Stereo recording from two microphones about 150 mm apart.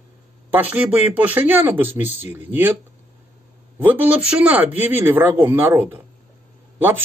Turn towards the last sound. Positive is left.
turn(degrees=-15)  # may be behind; listen again after turning